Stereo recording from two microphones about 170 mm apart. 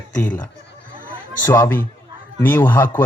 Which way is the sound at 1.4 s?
20° left (ahead or behind).